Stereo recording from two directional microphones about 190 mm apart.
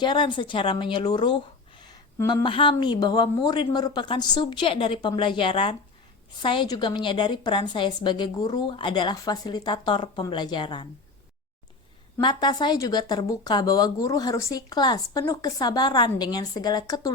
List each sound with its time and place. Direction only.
0.0 s speech: 25° left (ahead or behind)
12.1 s speech: 20° left (ahead or behind)